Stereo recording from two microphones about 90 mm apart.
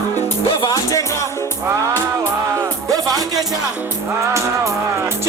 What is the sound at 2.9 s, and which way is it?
Music, 45° right (ahead or behind).